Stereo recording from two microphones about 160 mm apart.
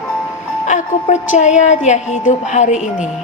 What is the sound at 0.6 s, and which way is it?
A woman's voice, 50° left (ahead or behind).